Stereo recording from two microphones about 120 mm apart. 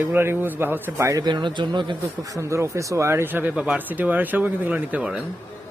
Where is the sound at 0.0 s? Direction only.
20° right (ahead or behind); by 2.3 s 40° right (ahead or behind).